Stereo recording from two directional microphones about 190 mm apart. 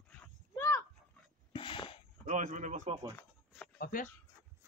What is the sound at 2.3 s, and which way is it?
Speech, 40° right (ahead or behind).